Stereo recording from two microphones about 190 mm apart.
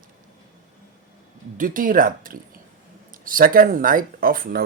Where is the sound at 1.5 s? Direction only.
45° right (ahead or behind).